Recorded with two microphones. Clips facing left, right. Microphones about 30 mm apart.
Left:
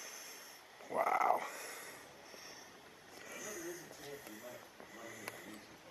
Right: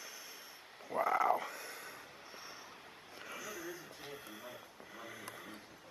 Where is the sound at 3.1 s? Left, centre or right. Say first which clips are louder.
Right 2 dB; right.